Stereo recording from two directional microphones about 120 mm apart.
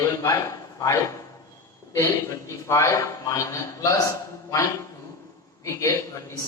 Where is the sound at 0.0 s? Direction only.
25° left (ahead or behind).